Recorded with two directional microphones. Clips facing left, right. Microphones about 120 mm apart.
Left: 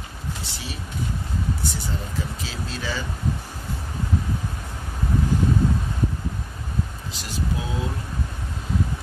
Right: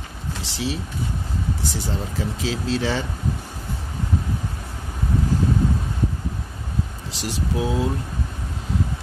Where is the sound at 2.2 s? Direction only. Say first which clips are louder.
Right 5 dB; 90° right.